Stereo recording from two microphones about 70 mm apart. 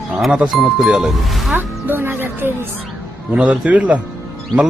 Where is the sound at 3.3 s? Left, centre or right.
Centre.